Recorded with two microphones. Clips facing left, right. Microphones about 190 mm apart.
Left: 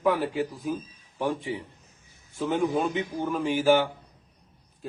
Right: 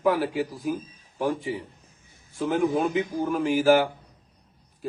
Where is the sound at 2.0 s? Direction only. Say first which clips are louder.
Right 2 dB; 55° right (ahead or behind).